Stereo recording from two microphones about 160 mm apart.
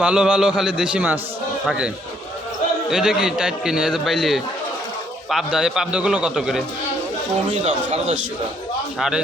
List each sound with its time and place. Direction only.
0.0 s a man's voice: 5° right (ahead or behind)
2.9 s a man's voice: 5° right (ahead or behind)
7.5 s speech: 40° right (ahead or behind)
9.0 s a man's voice: 5° right (ahead or behind)